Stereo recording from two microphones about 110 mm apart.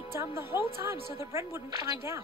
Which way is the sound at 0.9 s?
25° right (ahead or behind).